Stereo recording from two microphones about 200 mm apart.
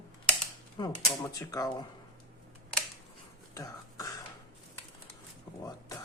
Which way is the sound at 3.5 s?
15° left (ahead or behind).